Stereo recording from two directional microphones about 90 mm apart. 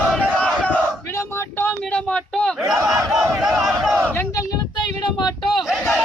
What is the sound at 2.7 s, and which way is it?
Battle cry, 40° right (ahead or behind).